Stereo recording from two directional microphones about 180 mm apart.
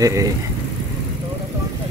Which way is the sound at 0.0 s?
20° right (ahead or behind).